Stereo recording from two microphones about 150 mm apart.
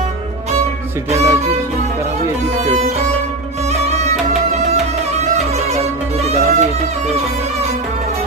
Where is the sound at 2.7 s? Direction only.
45° right (ahead or behind).